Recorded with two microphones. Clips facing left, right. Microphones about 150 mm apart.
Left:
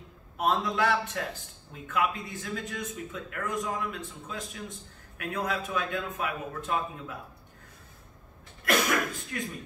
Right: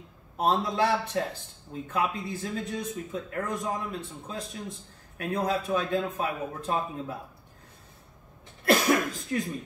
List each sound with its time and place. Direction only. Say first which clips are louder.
0.4 s a man's voice: right 2 dB; 30° right (ahead or behind)
8.6 s cough: right 4 dB; 35° right (ahead or behind)